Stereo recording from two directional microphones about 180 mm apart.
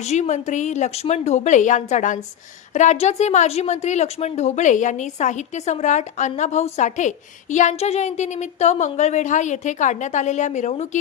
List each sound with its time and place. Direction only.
0.0 s a woman's voice: 40° left (ahead or behind)